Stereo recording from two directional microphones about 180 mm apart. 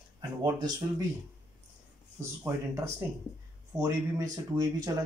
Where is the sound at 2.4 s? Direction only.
15° right (ahead or behind).